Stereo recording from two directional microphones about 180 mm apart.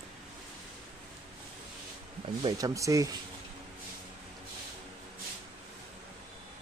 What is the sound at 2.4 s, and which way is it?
Speech, 25° right (ahead or behind).